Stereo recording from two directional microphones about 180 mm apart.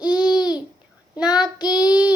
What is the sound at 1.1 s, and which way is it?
Child singing, 5° right (ahead or behind).